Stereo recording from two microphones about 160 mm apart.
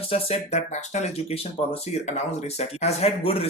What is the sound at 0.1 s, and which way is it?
Speech, 40° left (ahead or behind).